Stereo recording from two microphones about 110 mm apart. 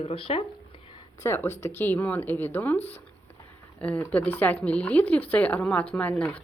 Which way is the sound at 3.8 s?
10° left (ahead or behind).